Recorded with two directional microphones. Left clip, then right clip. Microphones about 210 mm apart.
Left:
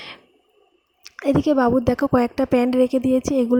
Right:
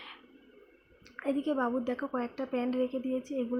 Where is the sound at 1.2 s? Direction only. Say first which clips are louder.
Left 13 dB; 55° left (ahead or behind).